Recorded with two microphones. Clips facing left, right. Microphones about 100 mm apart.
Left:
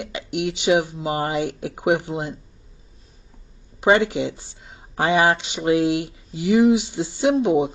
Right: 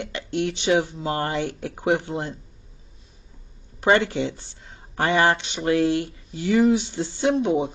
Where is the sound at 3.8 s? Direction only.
15° left (ahead or behind).